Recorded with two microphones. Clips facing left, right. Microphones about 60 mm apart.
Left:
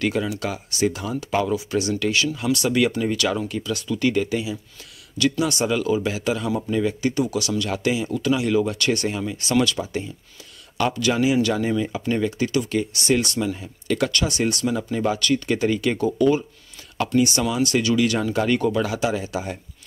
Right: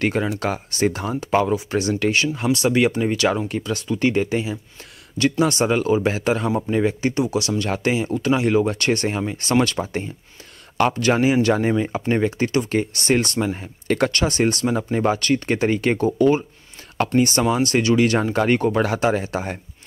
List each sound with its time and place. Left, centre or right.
0.0 s speech: right